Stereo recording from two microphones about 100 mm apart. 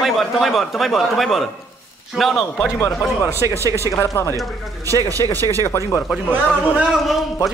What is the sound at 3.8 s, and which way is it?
Speech, 35° left (ahead or behind).